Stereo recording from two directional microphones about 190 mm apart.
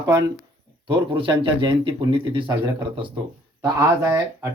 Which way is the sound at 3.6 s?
15° right (ahead or behind).